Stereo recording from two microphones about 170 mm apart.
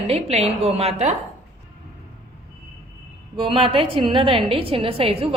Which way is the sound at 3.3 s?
30° right (ahead or behind).